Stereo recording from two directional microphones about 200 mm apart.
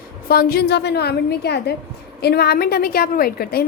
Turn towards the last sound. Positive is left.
turn(degrees=50)  # may be behind; listen again after turning